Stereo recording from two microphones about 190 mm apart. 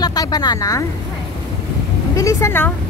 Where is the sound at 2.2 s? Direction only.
15° left (ahead or behind).